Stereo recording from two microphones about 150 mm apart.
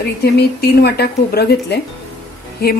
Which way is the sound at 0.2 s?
90° left.